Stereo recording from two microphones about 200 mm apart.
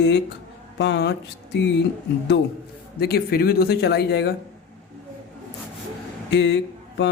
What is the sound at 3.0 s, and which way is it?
Speech, 50° left (ahead or behind).